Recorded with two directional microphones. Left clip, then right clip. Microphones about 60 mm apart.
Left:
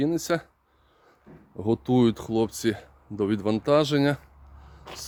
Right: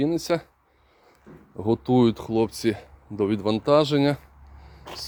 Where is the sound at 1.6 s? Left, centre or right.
Left.